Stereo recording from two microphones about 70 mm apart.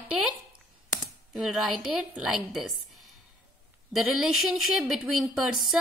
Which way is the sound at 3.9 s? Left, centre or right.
Centre.